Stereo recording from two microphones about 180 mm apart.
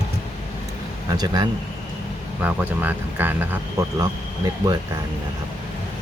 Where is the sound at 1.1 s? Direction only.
20° right (ahead or behind).